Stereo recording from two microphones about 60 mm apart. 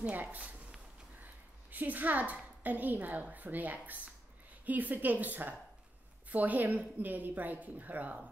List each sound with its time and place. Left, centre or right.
0.1 s a woman's voice: right